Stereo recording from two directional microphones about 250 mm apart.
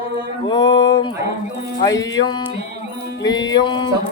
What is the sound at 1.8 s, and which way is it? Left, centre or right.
Speech, centre.